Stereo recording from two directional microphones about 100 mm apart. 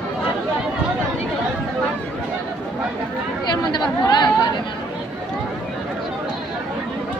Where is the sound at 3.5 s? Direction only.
45° left (ahead or behind).